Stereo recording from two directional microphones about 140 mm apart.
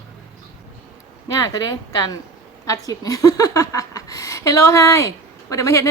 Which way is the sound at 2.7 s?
25° left (ahead or behind).